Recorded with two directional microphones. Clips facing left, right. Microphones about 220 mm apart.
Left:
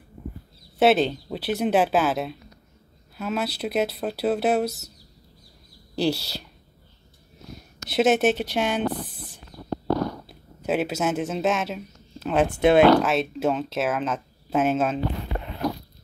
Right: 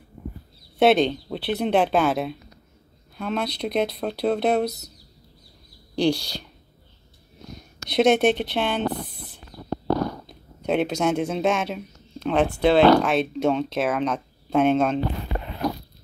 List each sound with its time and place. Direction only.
0.7 s speech: 5° left (ahead or behind)
5.9 s speech: 5° left (ahead or behind)
7.5 s speech: 5° left (ahead or behind)
10.2 s speech: 5° left (ahead or behind)
12.5 s speech: 20° left (ahead or behind)
13.0 s speech: centre (ahead or behind)